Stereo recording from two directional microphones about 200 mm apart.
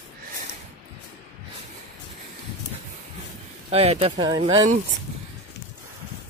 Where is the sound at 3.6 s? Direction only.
30° right (ahead or behind).